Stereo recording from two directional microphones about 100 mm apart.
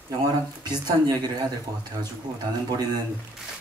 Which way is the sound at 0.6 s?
40° right (ahead or behind).